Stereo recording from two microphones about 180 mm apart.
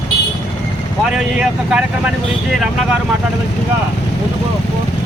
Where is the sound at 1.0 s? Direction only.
5° right (ahead or behind).